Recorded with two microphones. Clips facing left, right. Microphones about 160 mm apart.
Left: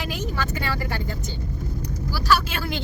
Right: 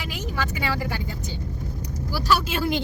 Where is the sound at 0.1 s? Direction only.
10° right (ahead or behind).